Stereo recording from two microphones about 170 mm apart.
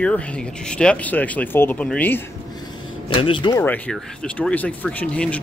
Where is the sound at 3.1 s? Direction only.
30° left (ahead or behind).